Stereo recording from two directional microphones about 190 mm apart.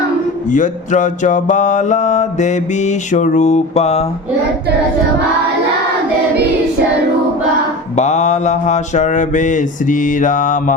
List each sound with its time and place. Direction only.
0.5 s mantra: 40° left (ahead or behind)
7.9 s mantra: 35° left (ahead or behind)